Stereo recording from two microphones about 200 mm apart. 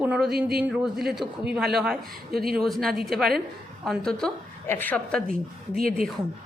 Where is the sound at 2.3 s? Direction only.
50° right (ahead or behind).